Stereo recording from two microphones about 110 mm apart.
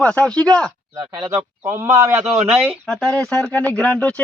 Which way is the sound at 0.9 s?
40° right (ahead or behind).